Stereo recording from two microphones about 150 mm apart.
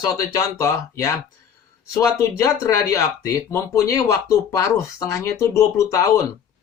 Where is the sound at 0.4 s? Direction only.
20° left (ahead or behind).